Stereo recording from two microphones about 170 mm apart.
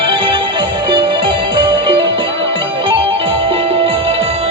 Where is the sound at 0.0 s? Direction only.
30° right (ahead or behind).